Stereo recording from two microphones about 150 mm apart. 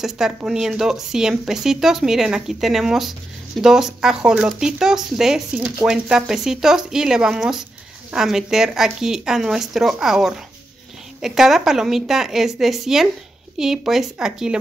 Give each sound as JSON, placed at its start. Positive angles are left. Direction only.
{"t": 0.0, "sound": "speech", "side_deg": -5}